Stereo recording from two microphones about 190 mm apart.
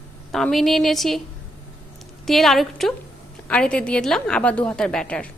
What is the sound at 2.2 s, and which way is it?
A woman's voice, centre (ahead or behind).